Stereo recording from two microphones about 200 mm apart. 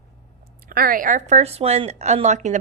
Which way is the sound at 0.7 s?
45° right (ahead or behind).